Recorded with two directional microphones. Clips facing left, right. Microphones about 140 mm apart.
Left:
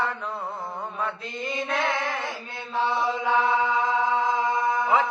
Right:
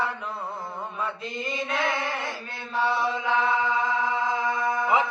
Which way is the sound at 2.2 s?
15° left (ahead or behind).